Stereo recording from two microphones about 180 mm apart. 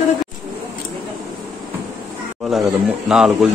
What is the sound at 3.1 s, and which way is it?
Speech, centre (ahead or behind).